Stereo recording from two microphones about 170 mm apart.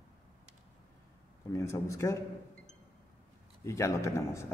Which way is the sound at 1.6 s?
15° left (ahead or behind).